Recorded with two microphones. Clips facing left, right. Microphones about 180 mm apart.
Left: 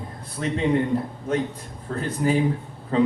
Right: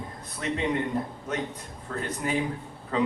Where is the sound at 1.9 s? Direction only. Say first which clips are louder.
Left 6 dB; 30° left (ahead or behind).